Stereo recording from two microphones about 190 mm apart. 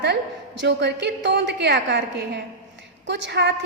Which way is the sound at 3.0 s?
65° right (ahead or behind).